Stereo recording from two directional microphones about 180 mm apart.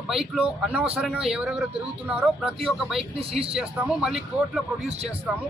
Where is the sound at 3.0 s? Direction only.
30° right (ahead or behind).